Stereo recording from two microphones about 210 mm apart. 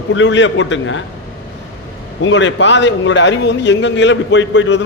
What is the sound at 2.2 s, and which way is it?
A man's voice, 60° left (ahead or behind).